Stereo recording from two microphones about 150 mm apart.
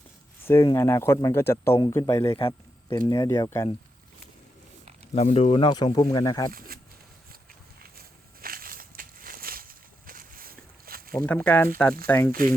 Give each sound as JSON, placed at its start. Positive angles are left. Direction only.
{"t": 0.4, "sound": "speech", "side_deg": 20}
{"t": 2.4, "sound": "a sound", "side_deg": 25}
{"t": 3.1, "sound": "speech", "side_deg": 20}
{"t": 5.1, "sound": "speech", "side_deg": 45}
{"t": 6.5, "sound": "speech", "side_deg": -70}
{"t": 7.8, "sound": "a sound", "side_deg": -80}
{"t": 11.1, "sound": "speech", "side_deg": 10}